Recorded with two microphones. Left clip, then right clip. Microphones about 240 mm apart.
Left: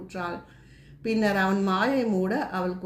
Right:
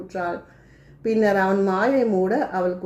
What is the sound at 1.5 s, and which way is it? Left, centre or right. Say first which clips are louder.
Speech: right 5 dB; left.